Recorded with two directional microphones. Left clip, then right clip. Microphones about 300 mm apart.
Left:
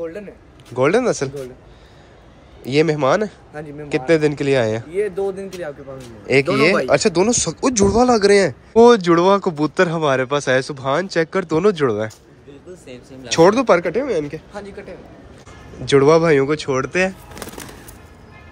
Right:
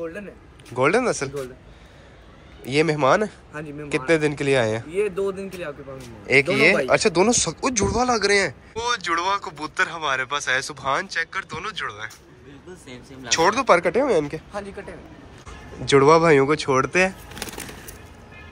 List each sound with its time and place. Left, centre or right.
0.7 s speech: centre
2.6 s speech: centre
5.1 s speech: centre
5.9 s speech: centre
13.4 s speech: centre
15.8 s speech: centre